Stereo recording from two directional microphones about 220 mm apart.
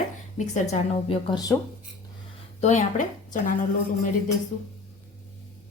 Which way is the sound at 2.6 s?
35° left (ahead or behind).